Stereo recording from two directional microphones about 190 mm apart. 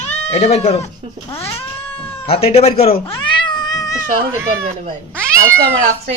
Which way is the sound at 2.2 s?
30° left (ahead or behind).